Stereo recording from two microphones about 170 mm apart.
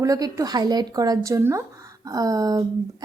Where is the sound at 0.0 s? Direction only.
20° right (ahead or behind).